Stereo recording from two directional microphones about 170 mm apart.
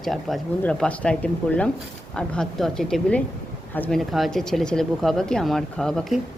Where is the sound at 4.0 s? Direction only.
Centre (ahead or behind).